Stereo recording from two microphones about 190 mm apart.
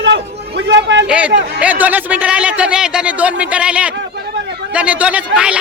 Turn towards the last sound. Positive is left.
turn(degrees=-5)  # may be behind; listen again after turning